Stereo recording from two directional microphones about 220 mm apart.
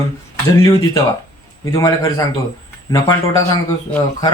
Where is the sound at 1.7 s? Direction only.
15° left (ahead or behind).